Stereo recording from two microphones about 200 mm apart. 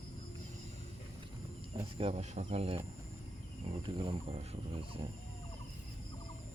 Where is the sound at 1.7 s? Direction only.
30° right (ahead or behind).